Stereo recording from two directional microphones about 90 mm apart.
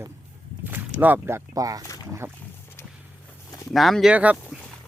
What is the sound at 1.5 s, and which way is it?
Speech, 40° right (ahead or behind).